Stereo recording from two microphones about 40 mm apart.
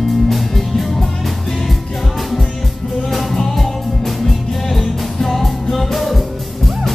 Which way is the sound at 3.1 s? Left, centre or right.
Centre.